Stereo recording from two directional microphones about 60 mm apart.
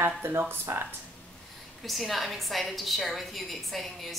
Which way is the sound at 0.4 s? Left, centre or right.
Right.